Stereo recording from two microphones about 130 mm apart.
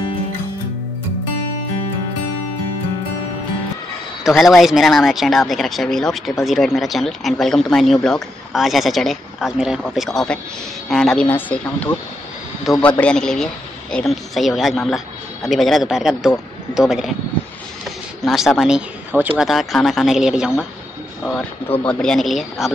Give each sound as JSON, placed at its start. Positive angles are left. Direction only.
{"t": 4.2, "sound": "speech", "side_deg": 0}
{"t": 11.2, "sound": "speech", "side_deg": 15}
{"t": 18.2, "sound": "speech", "side_deg": 0}
{"t": 19.4, "sound": "speech", "side_deg": 0}
{"t": 21.8, "sound": "speech", "side_deg": 5}